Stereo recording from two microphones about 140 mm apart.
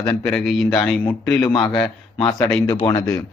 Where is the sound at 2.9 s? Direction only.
25° left (ahead or behind).